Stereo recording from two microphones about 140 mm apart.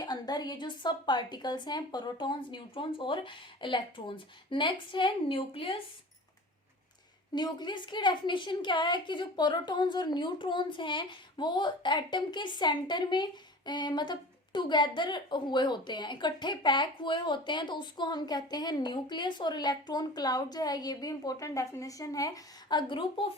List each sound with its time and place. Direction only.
0.0 s a woman's voice: 30° left (ahead or behind)
7.3 s a woman's voice: 30° left (ahead or behind)